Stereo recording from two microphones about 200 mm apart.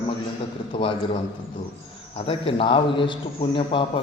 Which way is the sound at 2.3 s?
25° left (ahead or behind).